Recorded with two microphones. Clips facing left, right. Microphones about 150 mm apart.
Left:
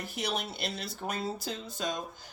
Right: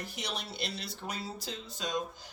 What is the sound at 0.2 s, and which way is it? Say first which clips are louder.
Speech: left 6 dB; 50° left (ahead or behind).